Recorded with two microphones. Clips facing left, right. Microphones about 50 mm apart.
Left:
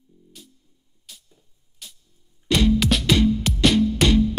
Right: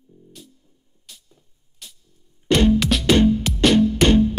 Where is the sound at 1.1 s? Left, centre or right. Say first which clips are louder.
Even; centre.